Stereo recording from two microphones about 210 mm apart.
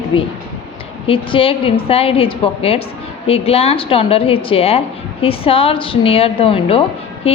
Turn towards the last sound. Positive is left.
turn(degrees=30)  # may be behind; listen again after turning